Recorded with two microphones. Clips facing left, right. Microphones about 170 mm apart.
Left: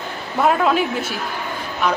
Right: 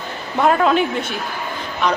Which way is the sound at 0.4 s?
5° left (ahead or behind).